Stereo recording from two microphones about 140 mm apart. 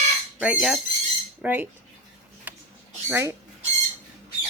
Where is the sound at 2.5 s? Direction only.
10° right (ahead or behind).